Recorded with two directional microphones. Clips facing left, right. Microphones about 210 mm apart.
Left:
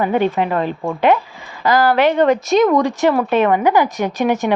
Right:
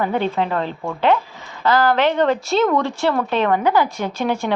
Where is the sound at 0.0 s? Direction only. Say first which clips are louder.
Left 4 dB; 15° left (ahead or behind).